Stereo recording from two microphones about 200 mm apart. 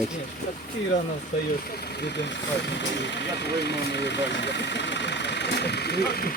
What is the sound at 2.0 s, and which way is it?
Speech, 55° left (ahead or behind).